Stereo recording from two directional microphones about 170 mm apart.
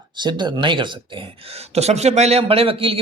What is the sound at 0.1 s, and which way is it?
Speech, 25° right (ahead or behind).